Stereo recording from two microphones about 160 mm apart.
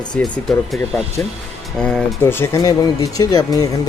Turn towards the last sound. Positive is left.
turn(degrees=20)  # may be behind; listen again after turning